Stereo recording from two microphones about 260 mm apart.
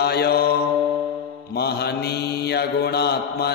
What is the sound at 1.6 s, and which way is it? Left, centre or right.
Mantra, left.